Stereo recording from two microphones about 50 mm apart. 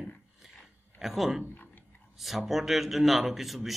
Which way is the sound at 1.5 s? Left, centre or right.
Left.